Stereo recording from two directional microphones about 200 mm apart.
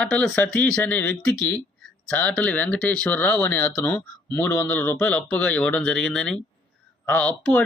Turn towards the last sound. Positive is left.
turn(degrees=5)  # may be behind; listen again after turning